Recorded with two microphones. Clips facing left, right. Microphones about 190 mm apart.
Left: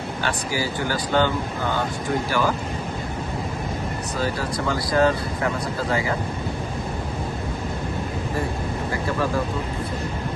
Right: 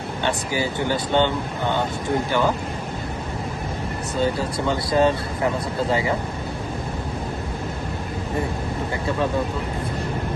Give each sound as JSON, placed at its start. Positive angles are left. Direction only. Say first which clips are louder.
{"t": 0.2, "sound": "speech", "louder": "right 3 dB", "side_deg": -20}
{"t": 4.2, "sound": "speech", "louder": "right 3 dB", "side_deg": -25}